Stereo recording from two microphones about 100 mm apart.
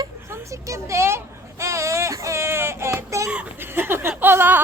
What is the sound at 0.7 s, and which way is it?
Baby cry, 30° right (ahead or behind).